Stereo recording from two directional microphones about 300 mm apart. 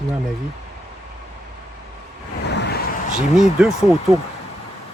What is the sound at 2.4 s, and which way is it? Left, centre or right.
Vehicle, left.